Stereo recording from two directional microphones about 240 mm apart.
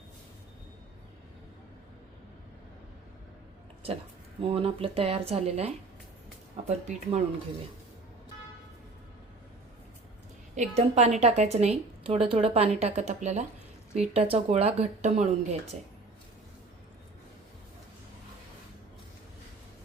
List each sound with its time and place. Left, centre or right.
4.4 s a woman's voice: right
10.5 s a woman's voice: right